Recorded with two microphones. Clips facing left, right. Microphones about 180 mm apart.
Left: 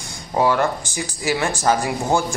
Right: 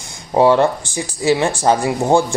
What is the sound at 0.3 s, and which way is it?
Speech, 25° right (ahead or behind).